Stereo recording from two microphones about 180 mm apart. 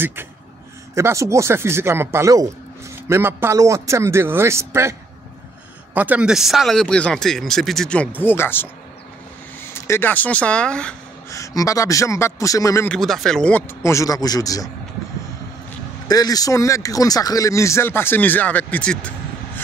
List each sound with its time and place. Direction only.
0.0 s a man's voice: 10° right (ahead or behind)
5.9 s speech: 10° right (ahead or behind); by 8.6 s 10° left (ahead or behind)
9.7 s speech: 15° left (ahead or behind)
11.2 s speech: 15° left (ahead or behind)
12.9 s speech: centre (ahead or behind); by 14.7 s 20° left (ahead or behind)
16.1 s speech: 20° left (ahead or behind)